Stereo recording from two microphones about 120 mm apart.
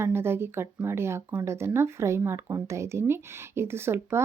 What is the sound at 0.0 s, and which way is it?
Speech, 20° right (ahead or behind).